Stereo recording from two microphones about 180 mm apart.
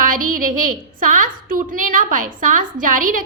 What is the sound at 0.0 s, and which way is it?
A woman's voice, 50° right (ahead or behind).